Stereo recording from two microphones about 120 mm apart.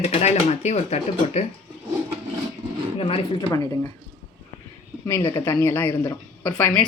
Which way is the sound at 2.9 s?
55° left (ahead or behind).